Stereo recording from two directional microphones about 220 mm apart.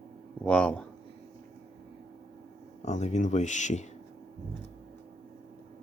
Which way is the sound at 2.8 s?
30° left (ahead or behind).